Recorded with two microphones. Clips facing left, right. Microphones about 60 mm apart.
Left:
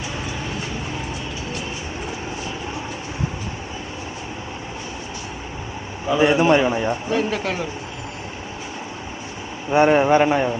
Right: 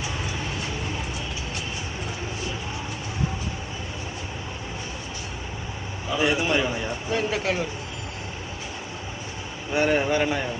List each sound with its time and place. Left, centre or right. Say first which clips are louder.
6.1 s speech: left 7 dB; left
7.1 s speech: left 3 dB; centre
9.7 s a man's voice: left 7 dB; left